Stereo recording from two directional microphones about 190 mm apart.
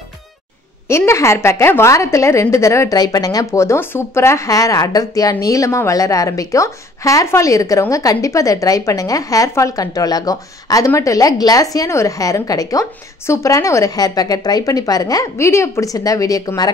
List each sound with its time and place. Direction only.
0.8 s a woman's voice: 15° left (ahead or behind)